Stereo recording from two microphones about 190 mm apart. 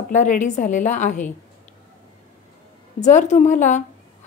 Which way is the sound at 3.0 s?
40° left (ahead or behind).